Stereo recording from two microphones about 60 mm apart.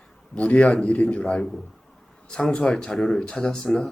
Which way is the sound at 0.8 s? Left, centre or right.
Centre.